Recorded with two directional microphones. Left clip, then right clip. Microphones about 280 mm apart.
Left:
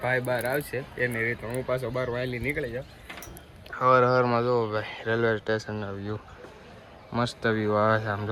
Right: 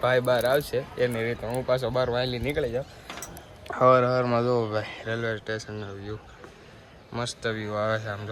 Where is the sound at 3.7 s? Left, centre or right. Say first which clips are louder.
Right 1 dB; centre.